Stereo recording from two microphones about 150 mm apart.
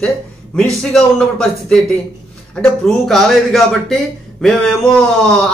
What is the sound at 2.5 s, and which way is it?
A man's voice, centre (ahead or behind).